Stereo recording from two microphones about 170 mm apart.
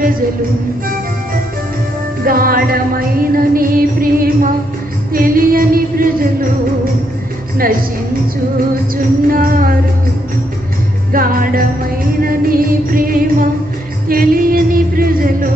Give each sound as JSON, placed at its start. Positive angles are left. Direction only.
{"t": 2.2, "sound": "music", "side_deg": -60}
{"t": 8.9, "sound": "music", "side_deg": -55}
{"t": 11.1, "sound": "music", "side_deg": -55}